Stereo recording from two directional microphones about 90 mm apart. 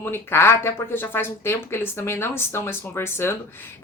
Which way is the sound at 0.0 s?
25° left (ahead or behind).